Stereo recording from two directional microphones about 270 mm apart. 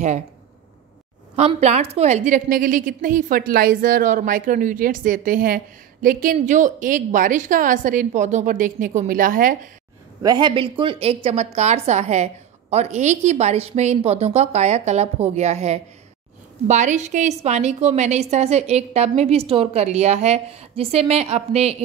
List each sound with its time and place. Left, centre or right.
1.3 s a woman's voice: right
10.2 s a woman's voice: centre